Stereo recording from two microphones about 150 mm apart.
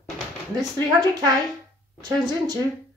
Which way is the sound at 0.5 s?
25° right (ahead or behind).